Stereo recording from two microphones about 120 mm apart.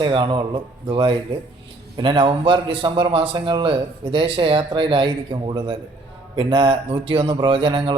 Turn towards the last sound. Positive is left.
turn(degrees=-45)  # may be behind; listen again after turning